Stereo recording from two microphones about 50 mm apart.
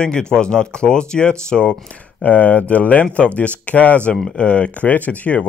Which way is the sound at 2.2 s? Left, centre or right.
Left.